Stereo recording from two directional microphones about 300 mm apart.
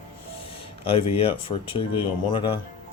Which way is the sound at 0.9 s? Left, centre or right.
Centre.